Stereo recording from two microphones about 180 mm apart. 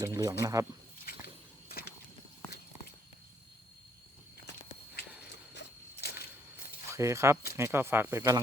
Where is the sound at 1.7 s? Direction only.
55° left (ahead or behind).